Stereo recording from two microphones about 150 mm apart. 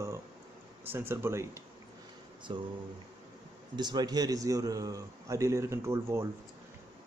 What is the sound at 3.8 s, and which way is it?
A man's voice, 30° right (ahead or behind).